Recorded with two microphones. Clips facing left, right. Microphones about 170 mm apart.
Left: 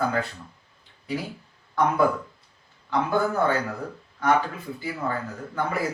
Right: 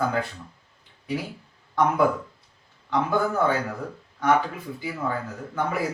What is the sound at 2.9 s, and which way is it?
Speech, 10° right (ahead or behind).